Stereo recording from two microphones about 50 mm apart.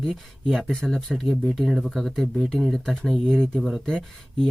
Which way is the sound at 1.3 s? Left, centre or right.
Centre.